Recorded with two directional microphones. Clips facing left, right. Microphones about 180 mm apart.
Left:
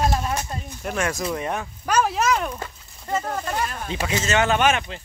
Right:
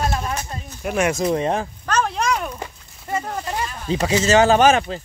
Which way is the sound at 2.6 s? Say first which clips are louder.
Right 2 dB; 15° right (ahead or behind).